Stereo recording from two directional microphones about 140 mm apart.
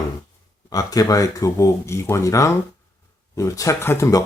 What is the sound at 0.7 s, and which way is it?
Speech, 25° left (ahead or behind).